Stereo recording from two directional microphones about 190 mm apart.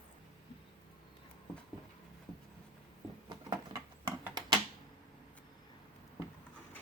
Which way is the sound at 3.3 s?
20° right (ahead or behind).